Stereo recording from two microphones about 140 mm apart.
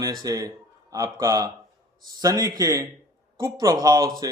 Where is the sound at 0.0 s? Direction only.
25° right (ahead or behind).